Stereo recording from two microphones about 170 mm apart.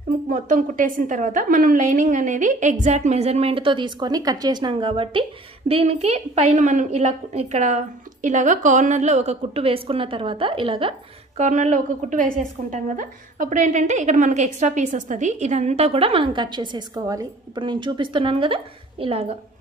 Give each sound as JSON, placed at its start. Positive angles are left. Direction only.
{"t": 0.3, "sound": "a woman's voice", "side_deg": -50}
{"t": 11.3, "sound": "a woman's voice", "side_deg": -45}